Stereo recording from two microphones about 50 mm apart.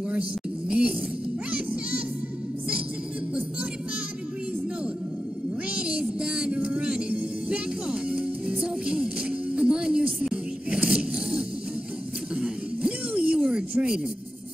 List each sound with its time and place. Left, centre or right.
0.1 s speech: right
1.5 s music: right
5.7 s music: right
9.6 s a sound: centre
12.4 s music: right
13.4 s a sound: centre